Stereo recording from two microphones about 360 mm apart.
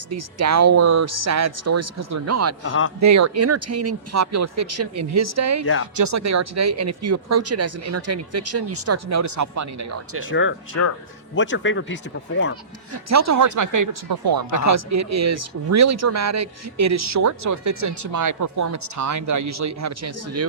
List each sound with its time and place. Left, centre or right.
0.1 s speech: right
2.6 s speech: left
3.0 s speech: right
10.2 s speech: left
12.9 s speech: right
14.6 s speech: right